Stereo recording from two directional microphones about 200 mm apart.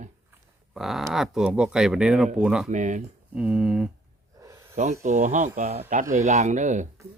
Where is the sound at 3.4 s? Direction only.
5° right (ahead or behind).